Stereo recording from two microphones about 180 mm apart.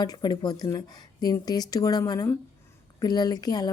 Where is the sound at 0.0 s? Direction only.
25° left (ahead or behind).